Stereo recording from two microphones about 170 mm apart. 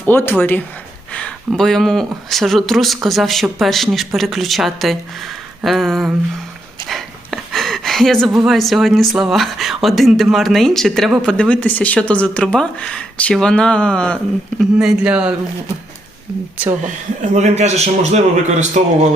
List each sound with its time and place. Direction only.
0.0 s speech: 10° left (ahead or behind); by 15.4 s 5° right (ahead or behind)
17.3 s a man's voice: 40° right (ahead or behind)